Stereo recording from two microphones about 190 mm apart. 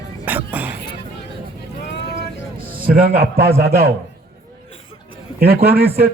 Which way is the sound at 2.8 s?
50° right (ahead or behind).